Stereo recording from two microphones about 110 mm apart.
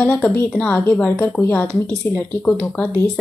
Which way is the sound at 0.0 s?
15° left (ahead or behind).